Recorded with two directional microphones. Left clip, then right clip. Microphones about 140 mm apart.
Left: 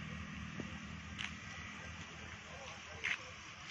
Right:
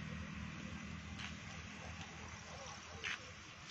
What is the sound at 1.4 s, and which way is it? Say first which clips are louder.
Music: left 3 dB; 45° left (ahead or behind).